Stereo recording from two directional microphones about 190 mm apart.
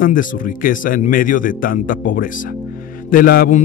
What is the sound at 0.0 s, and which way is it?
Speech, 45° left (ahead or behind).